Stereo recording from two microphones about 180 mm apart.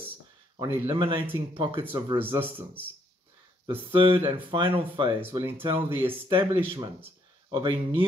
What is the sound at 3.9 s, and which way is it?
Speech, 30° right (ahead or behind).